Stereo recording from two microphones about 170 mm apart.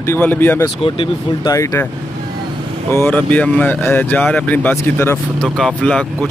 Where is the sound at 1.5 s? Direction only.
20° left (ahead or behind).